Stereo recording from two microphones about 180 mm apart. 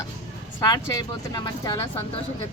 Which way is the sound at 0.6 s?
20° left (ahead or behind).